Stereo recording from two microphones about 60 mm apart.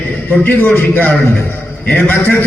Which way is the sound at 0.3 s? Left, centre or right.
Left.